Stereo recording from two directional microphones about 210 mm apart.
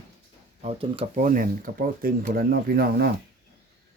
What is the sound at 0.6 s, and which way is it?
Speech, 25° right (ahead or behind).